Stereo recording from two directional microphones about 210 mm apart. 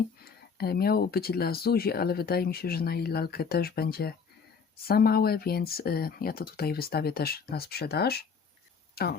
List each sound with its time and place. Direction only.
0.3 s speech: 45° left (ahead or behind)